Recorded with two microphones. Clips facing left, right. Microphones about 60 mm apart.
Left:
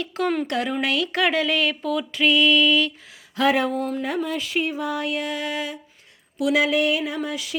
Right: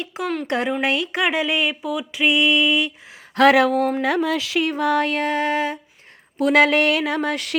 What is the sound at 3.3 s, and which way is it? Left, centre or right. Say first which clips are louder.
Music: right 6 dB; right.